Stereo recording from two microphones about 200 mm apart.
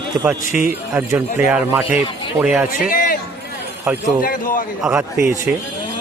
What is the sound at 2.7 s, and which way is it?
Speech, 45° left (ahead or behind).